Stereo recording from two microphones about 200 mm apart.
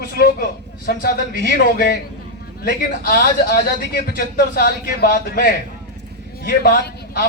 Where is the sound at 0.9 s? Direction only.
50° left (ahead or behind).